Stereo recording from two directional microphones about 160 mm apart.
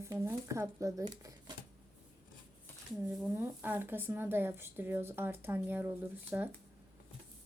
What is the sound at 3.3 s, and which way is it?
Speech, 10° right (ahead or behind).